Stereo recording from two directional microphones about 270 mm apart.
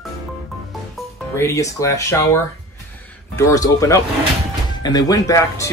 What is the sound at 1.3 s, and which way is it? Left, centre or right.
Speech, centre.